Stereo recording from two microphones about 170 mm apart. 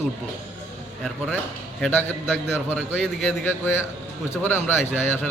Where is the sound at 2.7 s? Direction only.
5° right (ahead or behind).